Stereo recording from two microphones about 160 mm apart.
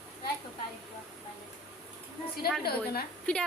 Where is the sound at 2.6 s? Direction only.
80° left.